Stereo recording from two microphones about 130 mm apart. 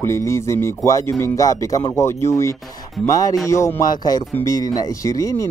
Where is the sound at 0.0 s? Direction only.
20° left (ahead or behind).